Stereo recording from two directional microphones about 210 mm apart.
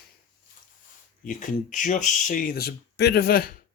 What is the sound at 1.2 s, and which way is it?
Speech, 40° left (ahead or behind).